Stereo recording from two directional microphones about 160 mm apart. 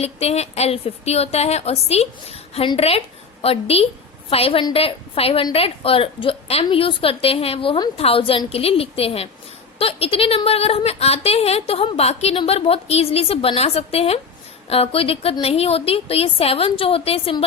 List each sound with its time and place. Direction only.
0.0 s a woman's voice: 40° left (ahead or behind)